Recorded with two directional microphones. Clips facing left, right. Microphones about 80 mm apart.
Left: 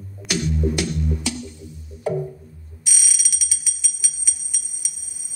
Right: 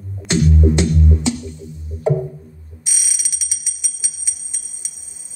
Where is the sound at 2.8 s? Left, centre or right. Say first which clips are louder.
Left 1 dB; right.